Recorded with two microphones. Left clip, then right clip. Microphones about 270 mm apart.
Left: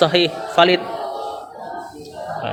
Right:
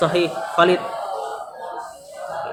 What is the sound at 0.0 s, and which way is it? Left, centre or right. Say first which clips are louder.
Speech: left 3 dB; left.